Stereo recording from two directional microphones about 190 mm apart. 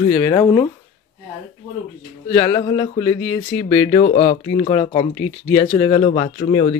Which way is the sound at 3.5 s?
75° left (ahead or behind).